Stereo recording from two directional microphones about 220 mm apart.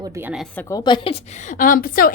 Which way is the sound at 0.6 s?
15° left (ahead or behind).